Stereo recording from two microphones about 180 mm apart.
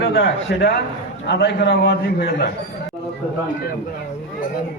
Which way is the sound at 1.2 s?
75° left (ahead or behind).